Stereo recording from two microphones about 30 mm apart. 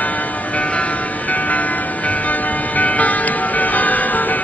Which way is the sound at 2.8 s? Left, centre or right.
Left.